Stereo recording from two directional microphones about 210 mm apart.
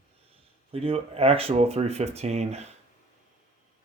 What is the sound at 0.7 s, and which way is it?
Speech, 30° right (ahead or behind).